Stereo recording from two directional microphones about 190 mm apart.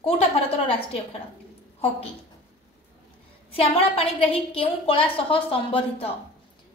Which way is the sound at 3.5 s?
30° left (ahead or behind).